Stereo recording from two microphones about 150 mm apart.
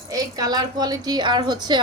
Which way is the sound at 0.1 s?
25° right (ahead or behind).